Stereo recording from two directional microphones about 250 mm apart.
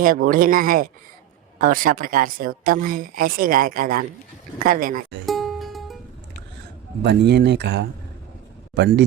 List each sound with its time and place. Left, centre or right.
0.0 s a woman's voice: right
5.2 s music: centre
7.0 s a man's voice: right